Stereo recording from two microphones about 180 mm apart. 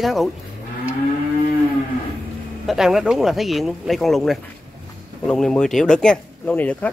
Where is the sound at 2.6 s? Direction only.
Centre (ahead or behind).